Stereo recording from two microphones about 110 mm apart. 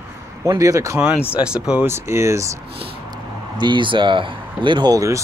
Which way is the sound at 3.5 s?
45° right (ahead or behind).